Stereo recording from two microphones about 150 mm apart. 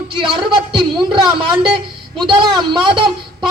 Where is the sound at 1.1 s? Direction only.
35° right (ahead or behind).